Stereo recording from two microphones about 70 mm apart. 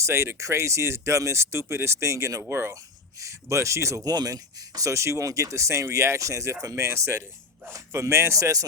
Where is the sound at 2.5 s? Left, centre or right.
Right.